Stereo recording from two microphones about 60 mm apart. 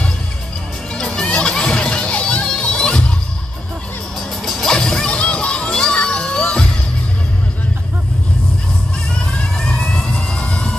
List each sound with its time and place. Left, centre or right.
0.9 s music: centre
4.5 s music: centre
4.7 s crowd: centre
9.2 s vehicle: centre